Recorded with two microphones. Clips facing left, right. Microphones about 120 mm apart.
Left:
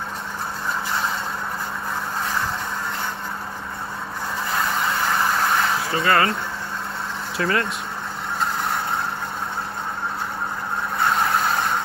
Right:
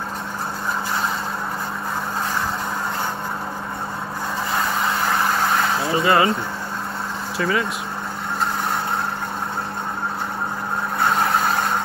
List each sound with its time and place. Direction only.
4.5 s vehicle: centre (ahead or behind)
5.8 s speech: 25° right (ahead or behind)
7.3 s speech: centre (ahead or behind)
11.0 s vehicle: centre (ahead or behind)